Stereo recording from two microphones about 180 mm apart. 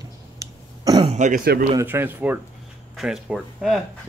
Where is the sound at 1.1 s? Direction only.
40° right (ahead or behind).